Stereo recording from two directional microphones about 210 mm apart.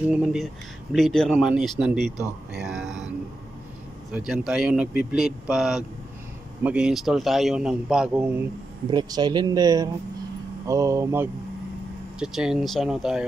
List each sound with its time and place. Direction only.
0.0 s a man's voice: 5° right (ahead or behind)
2.5 s a sound: centre (ahead or behind)
4.3 s a man's voice: 5° right (ahead or behind)
8.9 s speech: 20° right (ahead or behind)
12.2 s a man's voice: centre (ahead or behind)